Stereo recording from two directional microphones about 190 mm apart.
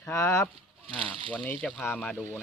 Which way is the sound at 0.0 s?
15° left (ahead or behind).